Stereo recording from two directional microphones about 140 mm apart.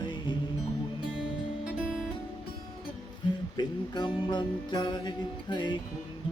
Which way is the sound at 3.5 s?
30° left (ahead or behind).